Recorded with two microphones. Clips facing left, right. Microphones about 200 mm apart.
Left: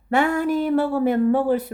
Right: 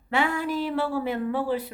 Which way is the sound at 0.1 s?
45° left (ahead or behind).